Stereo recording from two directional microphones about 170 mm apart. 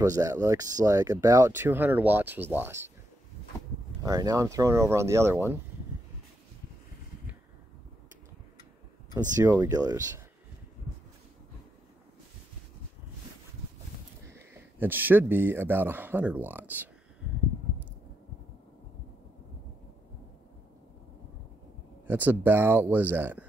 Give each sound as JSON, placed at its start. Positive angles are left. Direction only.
{"t": 0.0, "sound": "speech", "side_deg": -20}
{"t": 4.0, "sound": "speech", "side_deg": -20}
{"t": 9.3, "sound": "speech", "side_deg": -15}
{"t": 14.3, "sound": "speech", "side_deg": -10}
{"t": 22.0, "sound": "speech", "side_deg": -10}